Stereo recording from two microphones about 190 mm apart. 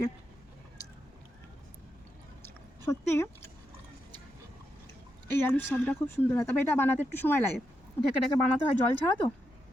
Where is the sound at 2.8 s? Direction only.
10° left (ahead or behind).